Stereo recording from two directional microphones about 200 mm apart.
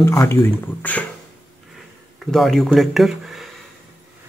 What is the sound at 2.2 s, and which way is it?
Speech, centre (ahead or behind).